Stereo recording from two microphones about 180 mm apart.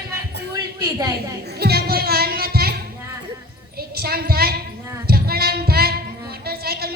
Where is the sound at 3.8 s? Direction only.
60° right (ahead or behind).